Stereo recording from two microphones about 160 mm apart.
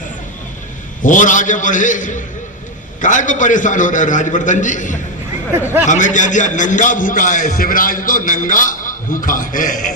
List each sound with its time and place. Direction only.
1.0 s a man's voice: 55° left (ahead or behind)
5.5 s speech: 15° right (ahead or behind)
5.8 s a man's voice: 50° left (ahead or behind)